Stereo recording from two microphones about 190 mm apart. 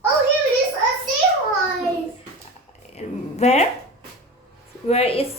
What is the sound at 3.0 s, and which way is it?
Speech, 40° left (ahead or behind).